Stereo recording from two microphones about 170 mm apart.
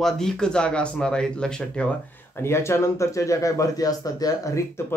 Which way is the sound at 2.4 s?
15° left (ahead or behind).